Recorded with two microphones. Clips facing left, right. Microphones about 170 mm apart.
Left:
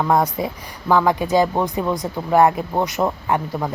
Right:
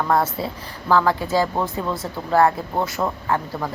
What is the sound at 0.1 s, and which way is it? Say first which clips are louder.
A woman's voice: left 2 dB; 15° left (ahead or behind).